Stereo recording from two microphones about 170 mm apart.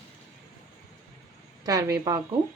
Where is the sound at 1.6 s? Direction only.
20° right (ahead or behind).